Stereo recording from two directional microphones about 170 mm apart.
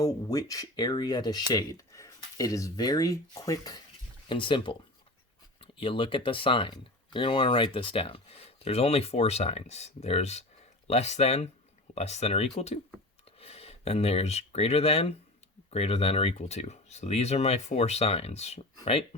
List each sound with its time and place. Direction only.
0.0 s speech: 20° left (ahead or behind)
5.8 s speech: 30° left (ahead or behind)